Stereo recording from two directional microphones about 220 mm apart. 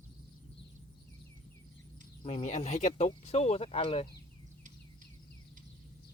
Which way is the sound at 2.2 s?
30° left (ahead or behind).